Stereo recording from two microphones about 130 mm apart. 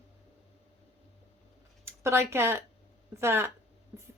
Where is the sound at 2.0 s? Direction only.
20° right (ahead or behind).